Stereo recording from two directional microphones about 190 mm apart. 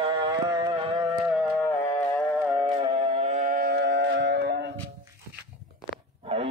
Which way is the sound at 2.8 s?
40° right (ahead or behind).